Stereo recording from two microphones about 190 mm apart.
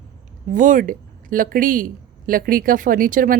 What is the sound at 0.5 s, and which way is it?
A man's voice, 45° right (ahead or behind).